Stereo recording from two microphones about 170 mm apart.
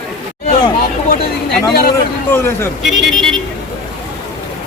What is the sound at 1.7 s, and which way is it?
Speech, 65° left (ahead or behind).